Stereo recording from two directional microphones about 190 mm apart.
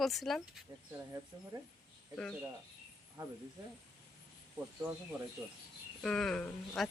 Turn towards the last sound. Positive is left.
turn(degrees=5)  # may be behind; listen again after turning